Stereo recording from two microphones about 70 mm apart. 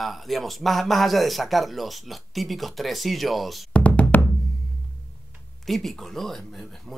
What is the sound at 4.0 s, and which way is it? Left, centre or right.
Music, left.